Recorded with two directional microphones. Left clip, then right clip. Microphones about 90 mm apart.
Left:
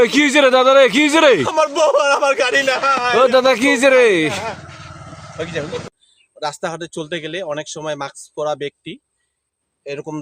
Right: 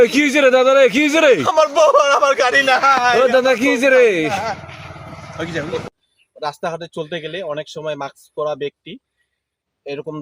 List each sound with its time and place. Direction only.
0.0 s a man's voice: 60° left (ahead or behind)
1.5 s a man's voice: 25° left (ahead or behind)
3.2 s speech: 85° left
5.4 s speech: 30° left (ahead or behind)
6.4 s speech: 55° left (ahead or behind)